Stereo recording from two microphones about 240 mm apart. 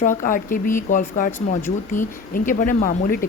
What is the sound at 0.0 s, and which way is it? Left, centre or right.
A woman's voice, left.